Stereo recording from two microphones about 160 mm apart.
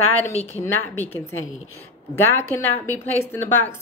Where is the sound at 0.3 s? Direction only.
40° left (ahead or behind).